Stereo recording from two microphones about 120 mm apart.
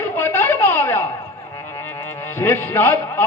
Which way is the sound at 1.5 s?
20° left (ahead or behind).